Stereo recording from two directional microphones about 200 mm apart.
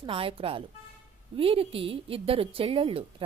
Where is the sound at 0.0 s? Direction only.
25° right (ahead or behind).